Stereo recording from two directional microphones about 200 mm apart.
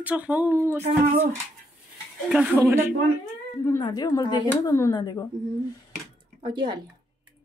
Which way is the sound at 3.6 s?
15° left (ahead or behind).